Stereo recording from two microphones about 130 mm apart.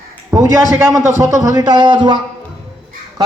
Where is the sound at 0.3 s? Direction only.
20° right (ahead or behind); by 2.1 s 35° right (ahead or behind).